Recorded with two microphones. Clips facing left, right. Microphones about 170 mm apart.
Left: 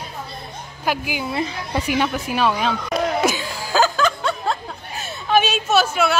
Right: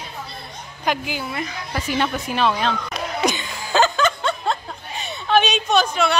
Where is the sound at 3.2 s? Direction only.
5° left (ahead or behind).